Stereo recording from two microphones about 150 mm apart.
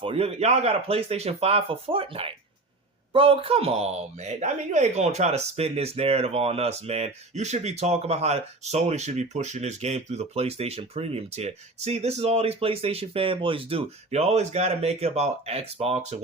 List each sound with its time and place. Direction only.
0.0 s a man's voice: 40° right (ahead or behind)